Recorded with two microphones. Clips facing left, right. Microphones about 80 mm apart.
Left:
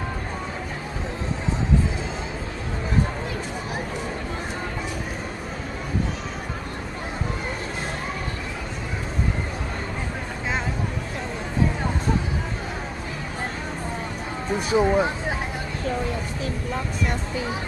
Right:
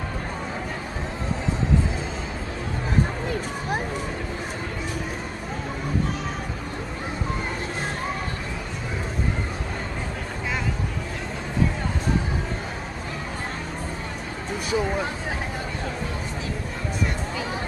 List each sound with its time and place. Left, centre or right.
14.7 s speech: left